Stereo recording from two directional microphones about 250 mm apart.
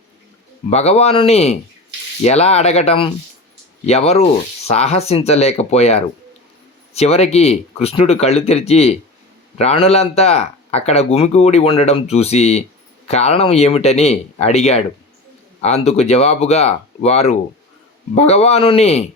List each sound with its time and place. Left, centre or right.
0.7 s speech: left